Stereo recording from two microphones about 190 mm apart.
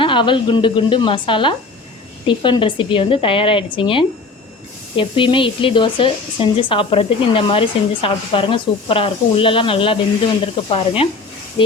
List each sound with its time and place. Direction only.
0.0 s speech: 25° left (ahead or behind)